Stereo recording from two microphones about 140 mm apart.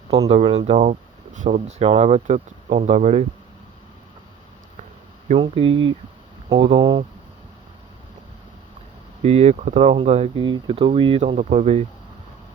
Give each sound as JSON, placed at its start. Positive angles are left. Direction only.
{"t": 0.3, "sound": "speech", "side_deg": -50}
{"t": 5.4, "sound": "speech", "side_deg": -40}
{"t": 9.2, "sound": "speech", "side_deg": -50}
{"t": 11.3, "sound": "speech", "side_deg": -55}